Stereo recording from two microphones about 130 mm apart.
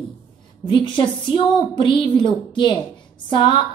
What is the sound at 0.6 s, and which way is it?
Speech, 35° left (ahead or behind).